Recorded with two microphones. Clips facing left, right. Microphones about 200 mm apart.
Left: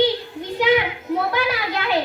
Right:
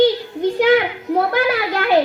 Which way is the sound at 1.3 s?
50° right (ahead or behind).